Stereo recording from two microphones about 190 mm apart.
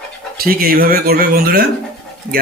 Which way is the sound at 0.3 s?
55° right (ahead or behind).